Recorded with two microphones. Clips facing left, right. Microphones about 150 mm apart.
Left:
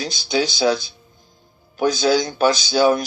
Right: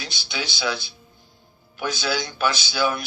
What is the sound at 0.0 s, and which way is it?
Speech, 40° left (ahead or behind).